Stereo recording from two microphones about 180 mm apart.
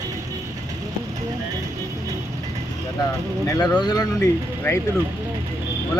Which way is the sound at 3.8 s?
20° left (ahead or behind).